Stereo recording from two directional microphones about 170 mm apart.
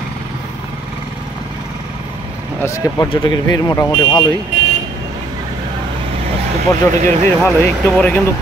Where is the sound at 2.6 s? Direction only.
20° left (ahead or behind).